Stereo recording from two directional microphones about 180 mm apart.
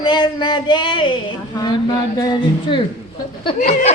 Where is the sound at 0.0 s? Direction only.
25° left (ahead or behind).